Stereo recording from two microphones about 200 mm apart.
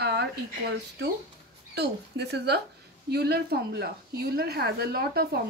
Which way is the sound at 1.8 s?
55° right (ahead or behind).